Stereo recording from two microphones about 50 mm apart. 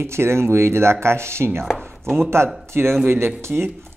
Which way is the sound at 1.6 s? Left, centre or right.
Centre.